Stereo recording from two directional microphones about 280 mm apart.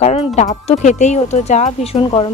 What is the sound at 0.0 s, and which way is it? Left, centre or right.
A woman's voice, left.